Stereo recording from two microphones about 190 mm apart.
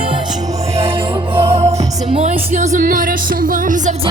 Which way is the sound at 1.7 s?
35° right (ahead or behind).